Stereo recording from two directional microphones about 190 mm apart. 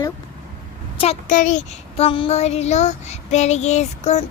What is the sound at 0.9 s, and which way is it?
Speech, 30° left (ahead or behind).